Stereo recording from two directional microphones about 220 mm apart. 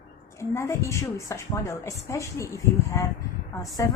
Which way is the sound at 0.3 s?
10° left (ahead or behind).